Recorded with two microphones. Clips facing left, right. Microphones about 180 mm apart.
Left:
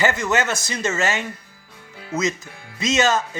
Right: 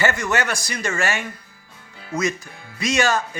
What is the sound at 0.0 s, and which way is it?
Speech, 20° left (ahead or behind).